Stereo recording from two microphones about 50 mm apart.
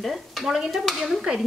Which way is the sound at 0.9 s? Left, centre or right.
Centre.